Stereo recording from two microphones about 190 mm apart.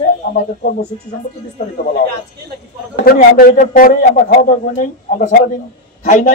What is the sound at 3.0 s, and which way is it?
A man's voice, 50° left (ahead or behind).